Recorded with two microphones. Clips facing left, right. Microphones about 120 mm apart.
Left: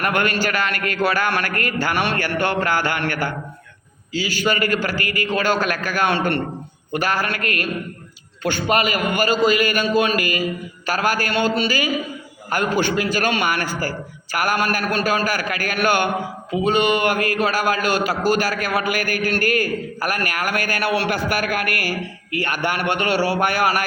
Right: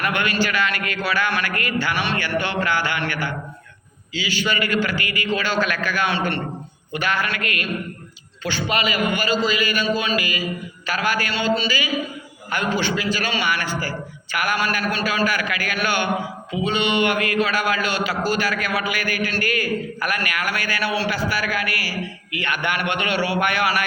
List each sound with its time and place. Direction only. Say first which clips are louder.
0.0 s a man's voice: left 2 dB; 45° left (ahead or behind)